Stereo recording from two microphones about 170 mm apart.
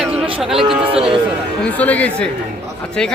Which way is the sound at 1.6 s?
10° left (ahead or behind).